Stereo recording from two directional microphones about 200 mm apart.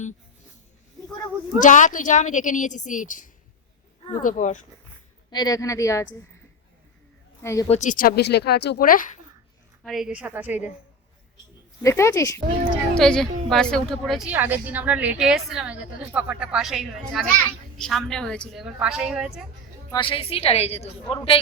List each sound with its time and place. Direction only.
1.5 s a woman's voice: 40° left (ahead or behind)
5.3 s a woman's voice: 20° left (ahead or behind)
7.4 s a woman's voice: 15° left (ahead or behind)
7.7 s speech: 40° left (ahead or behind)
9.8 s a woman's voice: centre (ahead or behind)
11.8 s a woman's voice: 15° left (ahead or behind)
13.0 s a woman's voice: centre (ahead or behind)
19.9 s a woman's voice: 25° left (ahead or behind)